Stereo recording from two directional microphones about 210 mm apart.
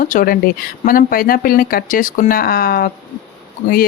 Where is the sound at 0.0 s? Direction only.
40° left (ahead or behind).